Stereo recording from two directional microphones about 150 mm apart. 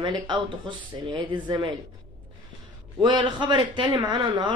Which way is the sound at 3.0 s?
30° right (ahead or behind).